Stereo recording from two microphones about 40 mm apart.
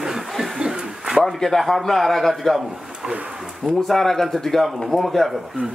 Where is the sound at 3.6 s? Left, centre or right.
Centre.